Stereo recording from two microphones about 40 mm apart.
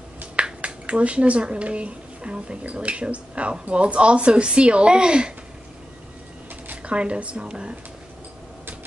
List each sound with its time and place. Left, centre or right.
0.4 s speech: right
6.8 s speech: right